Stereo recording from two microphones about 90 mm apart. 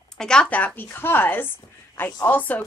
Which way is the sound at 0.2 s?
10° left (ahead or behind).